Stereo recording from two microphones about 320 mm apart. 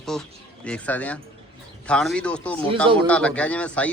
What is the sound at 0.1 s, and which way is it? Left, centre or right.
A man's voice, centre.